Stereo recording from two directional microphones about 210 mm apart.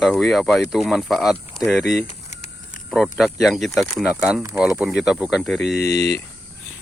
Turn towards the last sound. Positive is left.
turn(degrees=15)  # may be behind; listen again after turning